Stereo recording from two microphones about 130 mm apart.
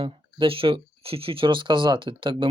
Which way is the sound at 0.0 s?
45° right (ahead or behind).